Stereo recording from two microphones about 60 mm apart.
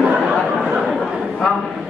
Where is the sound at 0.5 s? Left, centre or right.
Centre.